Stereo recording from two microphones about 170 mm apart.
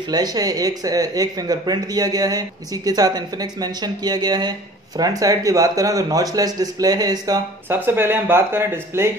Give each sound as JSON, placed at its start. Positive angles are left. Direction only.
{"t": 0.1, "sound": "speech", "side_deg": -20}